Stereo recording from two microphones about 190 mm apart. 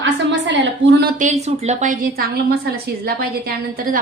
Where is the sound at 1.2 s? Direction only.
35° right (ahead or behind).